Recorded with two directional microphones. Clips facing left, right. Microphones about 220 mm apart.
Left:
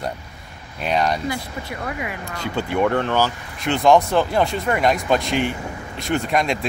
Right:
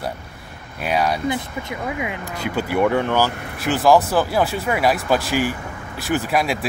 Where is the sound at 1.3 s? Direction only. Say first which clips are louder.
Right 3 dB; 20° right (ahead or behind).